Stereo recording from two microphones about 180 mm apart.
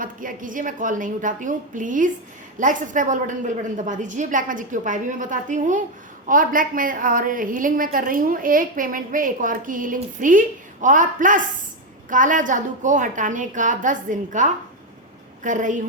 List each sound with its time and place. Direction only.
0.0 s a woman's voice: 50° right (ahead or behind)